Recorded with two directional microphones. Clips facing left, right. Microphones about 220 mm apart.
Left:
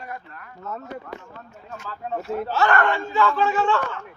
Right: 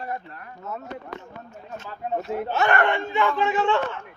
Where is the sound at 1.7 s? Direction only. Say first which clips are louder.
Right 1 dB; 20° right (ahead or behind).